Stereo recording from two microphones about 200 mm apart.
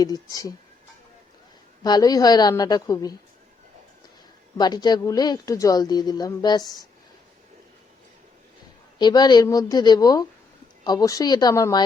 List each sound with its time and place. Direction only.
0.0 s speech: 20° left (ahead or behind)
1.8 s speech: 20° left (ahead or behind)
4.5 s speech: 20° left (ahead or behind)
9.0 s speech: 20° left (ahead or behind)